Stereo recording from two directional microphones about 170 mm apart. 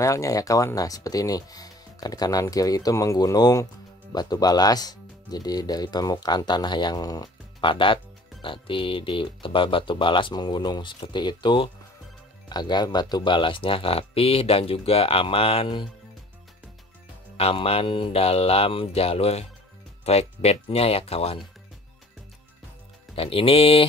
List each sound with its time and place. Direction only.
0.0 s speech: 20° left (ahead or behind)
17.4 s speech: 35° left (ahead or behind)
23.1 s speech: 35° left (ahead or behind)